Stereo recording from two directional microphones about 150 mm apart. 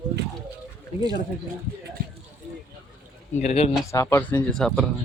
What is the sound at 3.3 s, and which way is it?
Speech, 50° left (ahead or behind).